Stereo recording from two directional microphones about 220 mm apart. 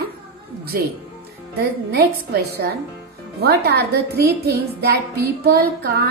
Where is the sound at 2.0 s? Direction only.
45° right (ahead or behind).